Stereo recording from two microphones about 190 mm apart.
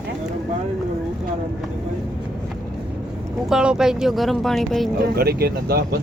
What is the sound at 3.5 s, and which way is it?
Speech, 5° right (ahead or behind).